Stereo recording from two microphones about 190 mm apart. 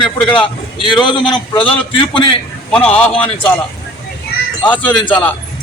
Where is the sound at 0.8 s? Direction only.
25° left (ahead or behind).